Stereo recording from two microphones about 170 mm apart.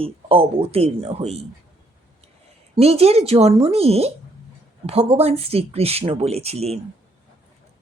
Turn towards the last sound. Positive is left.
turn(degrees=-40)  # may be behind; listen again after turning